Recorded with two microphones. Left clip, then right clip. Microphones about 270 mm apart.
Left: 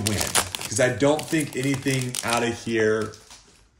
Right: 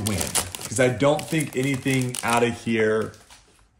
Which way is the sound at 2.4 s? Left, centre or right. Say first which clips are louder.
Even; right.